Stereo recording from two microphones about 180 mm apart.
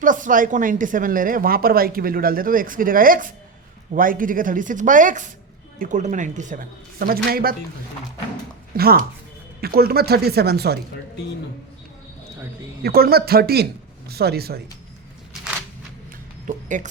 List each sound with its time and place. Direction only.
0.0 s speech: 45° right (ahead or behind)
8.7 s speech: 55° right (ahead or behind)
12.8 s speech: 60° right (ahead or behind)
16.5 s a sound: 45° right (ahead or behind)